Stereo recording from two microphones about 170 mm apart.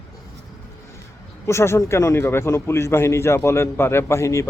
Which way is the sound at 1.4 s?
15° left (ahead or behind).